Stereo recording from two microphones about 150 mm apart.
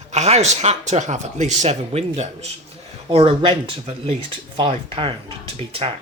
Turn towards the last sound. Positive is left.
turn(degrees=-40)  # may be behind; listen again after turning